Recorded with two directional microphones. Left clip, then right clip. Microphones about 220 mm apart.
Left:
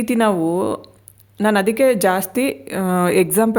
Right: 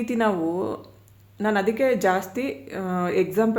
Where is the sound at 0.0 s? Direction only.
45° left (ahead or behind).